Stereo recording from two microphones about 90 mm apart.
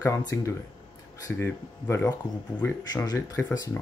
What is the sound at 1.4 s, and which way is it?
Speech, 25° left (ahead or behind).